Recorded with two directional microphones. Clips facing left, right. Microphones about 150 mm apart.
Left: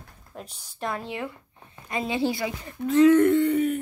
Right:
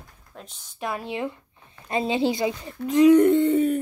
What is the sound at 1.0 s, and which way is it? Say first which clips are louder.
A woman's voice: right 4 dB; 20° right (ahead or behind).